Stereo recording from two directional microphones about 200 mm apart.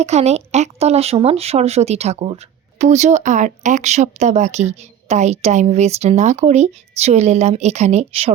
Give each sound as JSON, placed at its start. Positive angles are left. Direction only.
{"t": 0.0, "sound": "speech", "side_deg": -35}